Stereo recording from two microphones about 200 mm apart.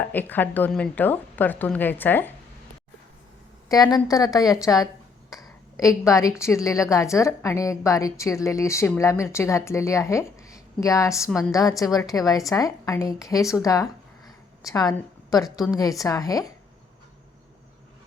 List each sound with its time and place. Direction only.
0.0 s a woman's voice: 10° left (ahead or behind)
3.7 s a woman's voice: 20° left (ahead or behind)
5.4 s a sound: 15° left (ahead or behind)
6.1 s a woman's voice: 15° left (ahead or behind)
11.3 s a woman's voice: 5° left (ahead or behind)
11.5 s a woman's voice: 15° left (ahead or behind)